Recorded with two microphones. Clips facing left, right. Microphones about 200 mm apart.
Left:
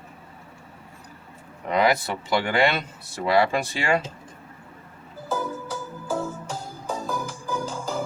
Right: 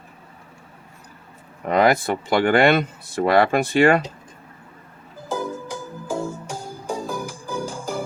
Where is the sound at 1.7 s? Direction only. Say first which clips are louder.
Right 4 dB; 50° right (ahead or behind).